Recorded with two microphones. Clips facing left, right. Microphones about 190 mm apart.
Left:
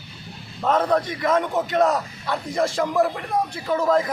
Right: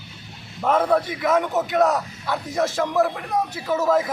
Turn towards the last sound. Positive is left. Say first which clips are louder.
# even
turn(degrees=-5)  # may be behind; listen again after turning